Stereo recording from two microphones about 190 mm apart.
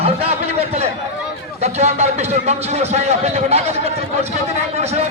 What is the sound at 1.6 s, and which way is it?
A man's voice, 35° right (ahead or behind).